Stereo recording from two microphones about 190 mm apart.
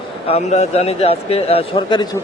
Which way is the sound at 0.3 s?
35° left (ahead or behind).